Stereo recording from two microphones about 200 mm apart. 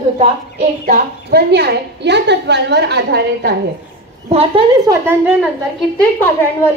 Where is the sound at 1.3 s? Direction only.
55° right (ahead or behind).